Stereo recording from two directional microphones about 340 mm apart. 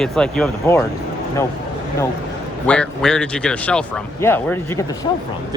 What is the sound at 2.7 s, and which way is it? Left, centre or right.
Speech, centre.